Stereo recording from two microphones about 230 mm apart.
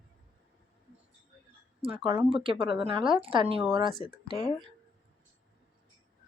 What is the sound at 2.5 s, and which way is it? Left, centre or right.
Speech, right.